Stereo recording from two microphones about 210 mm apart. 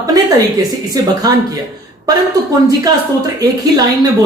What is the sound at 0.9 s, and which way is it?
Speech, 15° right (ahead or behind).